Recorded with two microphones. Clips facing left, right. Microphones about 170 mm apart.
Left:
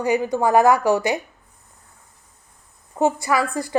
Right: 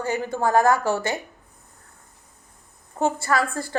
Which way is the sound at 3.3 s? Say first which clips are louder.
Left 2 dB; centre (ahead or behind).